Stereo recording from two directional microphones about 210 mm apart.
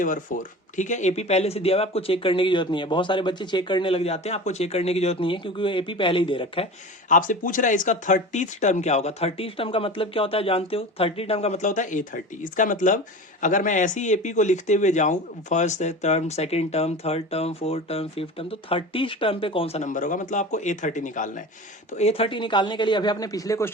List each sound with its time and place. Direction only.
0.0 s speech: 40° left (ahead or behind)
7.1 s speech: 40° left (ahead or behind); by 23.7 s 15° left (ahead or behind)